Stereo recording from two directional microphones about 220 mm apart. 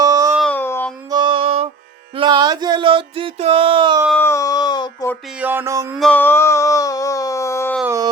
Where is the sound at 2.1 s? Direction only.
20° right (ahead or behind).